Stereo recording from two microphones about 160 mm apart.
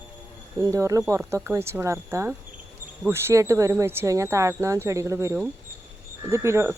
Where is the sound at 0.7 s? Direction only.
20° right (ahead or behind).